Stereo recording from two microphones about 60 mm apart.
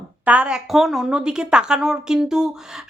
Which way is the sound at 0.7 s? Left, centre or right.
Centre.